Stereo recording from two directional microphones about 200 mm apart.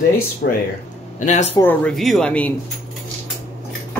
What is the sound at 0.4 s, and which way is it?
Speech, 60° left (ahead or behind).